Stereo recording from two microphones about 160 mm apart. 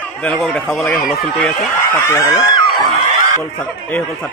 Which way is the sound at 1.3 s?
10° left (ahead or behind).